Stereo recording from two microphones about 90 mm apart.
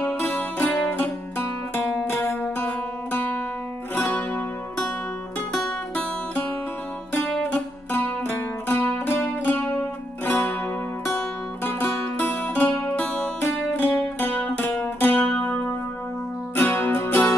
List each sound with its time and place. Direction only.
0.0 s music: 15° left (ahead or behind)
5.5 s music: 5° left (ahead or behind)
7.2 s music: 15° left (ahead or behind)
16.5 s music: 25° left (ahead or behind)